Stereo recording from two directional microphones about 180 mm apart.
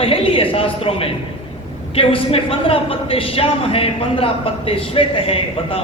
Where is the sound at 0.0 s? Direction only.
30° left (ahead or behind).